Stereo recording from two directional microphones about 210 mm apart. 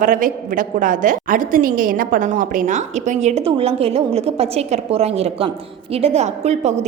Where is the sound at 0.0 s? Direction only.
40° right (ahead or behind).